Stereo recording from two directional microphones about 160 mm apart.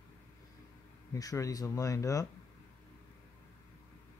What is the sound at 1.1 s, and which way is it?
Speech, 20° left (ahead or behind).